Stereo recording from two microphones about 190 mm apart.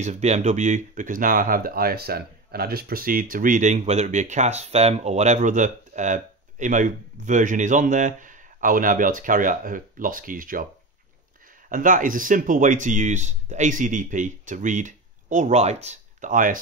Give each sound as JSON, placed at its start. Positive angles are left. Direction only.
{"t": 0.0, "sound": "speech", "side_deg": -35}
{"t": 11.7, "sound": "speech", "side_deg": -45}